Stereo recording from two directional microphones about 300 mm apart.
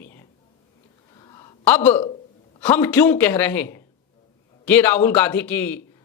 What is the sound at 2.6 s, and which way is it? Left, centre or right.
Speech, centre.